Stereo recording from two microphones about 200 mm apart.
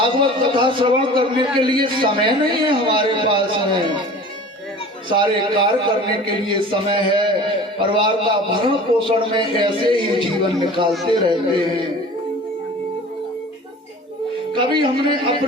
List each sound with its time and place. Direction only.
0.0 s a man's voice: 25° right (ahead or behind)
5.0 s a man's voice: 25° right (ahead or behind)
14.5 s a man's voice: 25° right (ahead or behind)